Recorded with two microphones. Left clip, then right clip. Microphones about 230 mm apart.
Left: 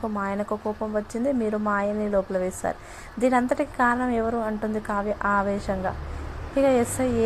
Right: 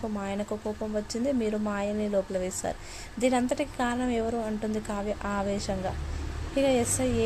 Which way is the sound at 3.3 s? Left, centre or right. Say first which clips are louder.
Left 5 dB; centre.